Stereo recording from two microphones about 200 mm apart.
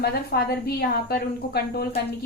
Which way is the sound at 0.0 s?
55° left (ahead or behind).